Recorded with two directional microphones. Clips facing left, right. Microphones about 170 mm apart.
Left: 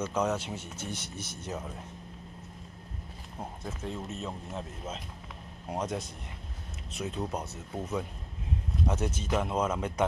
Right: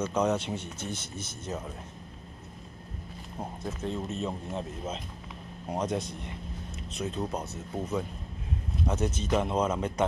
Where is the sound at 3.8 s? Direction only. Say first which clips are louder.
Right 5 dB; 5° left (ahead or behind).